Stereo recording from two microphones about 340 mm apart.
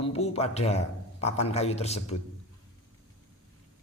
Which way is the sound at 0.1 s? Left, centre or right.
Centre.